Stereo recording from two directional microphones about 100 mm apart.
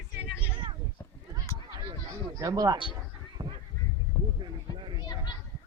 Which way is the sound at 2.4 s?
35° right (ahead or behind).